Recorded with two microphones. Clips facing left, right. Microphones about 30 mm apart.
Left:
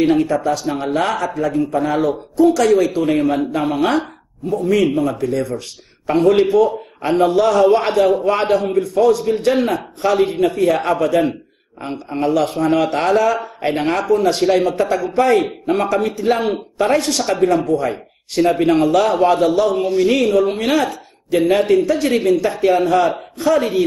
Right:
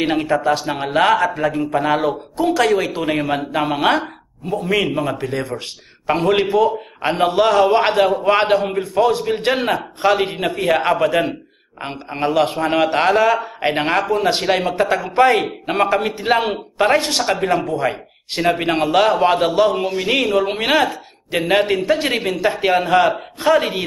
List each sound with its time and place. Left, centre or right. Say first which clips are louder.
0.0 s a man's voice: left 2 dB; right
7.0 s a man's voice: left 2 dB; right
19.8 s a man's voice: left 5 dB; centre
20.3 s speech: left 1 dB; right